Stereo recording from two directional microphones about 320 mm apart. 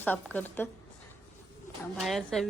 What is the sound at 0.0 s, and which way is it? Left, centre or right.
Speech, centre.